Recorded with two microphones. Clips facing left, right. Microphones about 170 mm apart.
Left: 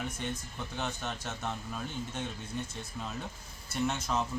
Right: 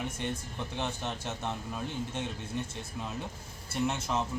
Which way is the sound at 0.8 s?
10° right (ahead or behind).